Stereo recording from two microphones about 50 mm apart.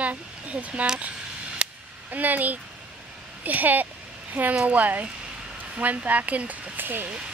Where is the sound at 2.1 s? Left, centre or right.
Right.